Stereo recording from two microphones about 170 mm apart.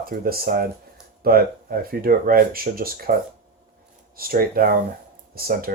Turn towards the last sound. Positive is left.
turn(degrees=-60)  # may be behind; listen again after turning